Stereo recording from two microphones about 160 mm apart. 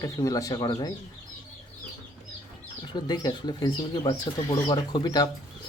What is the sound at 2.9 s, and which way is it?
Speech, 25° left (ahead or behind).